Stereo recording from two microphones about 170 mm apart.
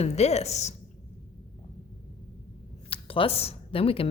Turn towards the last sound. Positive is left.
turn(degrees=35)  # may be behind; listen again after turning